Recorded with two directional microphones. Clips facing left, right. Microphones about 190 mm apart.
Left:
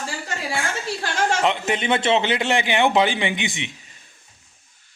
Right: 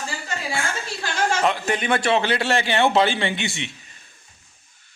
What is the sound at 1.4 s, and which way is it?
Speech, 20° left (ahead or behind).